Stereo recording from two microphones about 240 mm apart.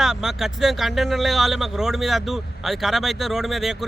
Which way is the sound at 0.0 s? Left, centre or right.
Centre.